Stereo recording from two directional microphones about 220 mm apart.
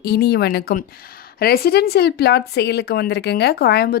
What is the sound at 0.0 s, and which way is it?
A woman's voice, 50° left (ahead or behind).